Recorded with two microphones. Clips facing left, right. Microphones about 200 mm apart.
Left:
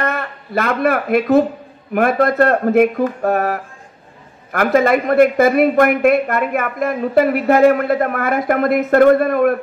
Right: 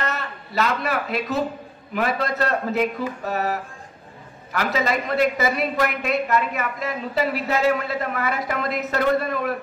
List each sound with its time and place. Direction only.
0.0 s a man's voice: 55° left (ahead or behind)